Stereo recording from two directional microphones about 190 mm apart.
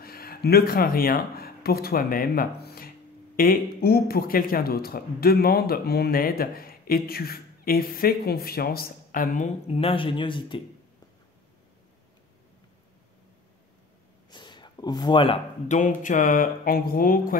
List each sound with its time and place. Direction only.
0.0 s speech: 50° left (ahead or behind)
9.7 s speech: 30° left (ahead or behind)
14.3 s a sound: 25° left (ahead or behind)
15.7 s speech: 40° left (ahead or behind)